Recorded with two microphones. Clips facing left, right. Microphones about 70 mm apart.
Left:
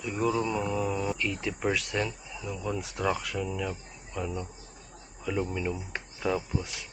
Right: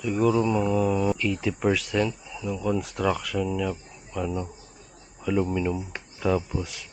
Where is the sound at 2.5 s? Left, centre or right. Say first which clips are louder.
Right 6 dB; centre.